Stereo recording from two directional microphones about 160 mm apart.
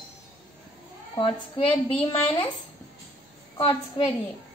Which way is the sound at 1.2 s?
35° left (ahead or behind).